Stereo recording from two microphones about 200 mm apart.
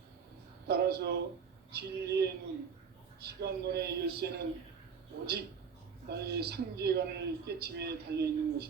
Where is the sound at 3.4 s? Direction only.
55° right (ahead or behind).